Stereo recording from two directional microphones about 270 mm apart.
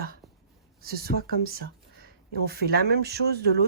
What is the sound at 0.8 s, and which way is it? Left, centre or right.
Speech, right.